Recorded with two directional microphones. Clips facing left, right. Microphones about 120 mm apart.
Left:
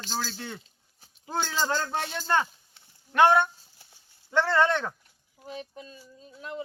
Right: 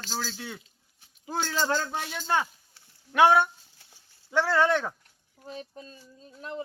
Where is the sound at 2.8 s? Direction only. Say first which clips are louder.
Even; 20° left (ahead or behind).